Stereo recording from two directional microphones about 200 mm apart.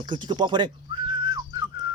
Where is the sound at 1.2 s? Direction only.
20° right (ahead or behind).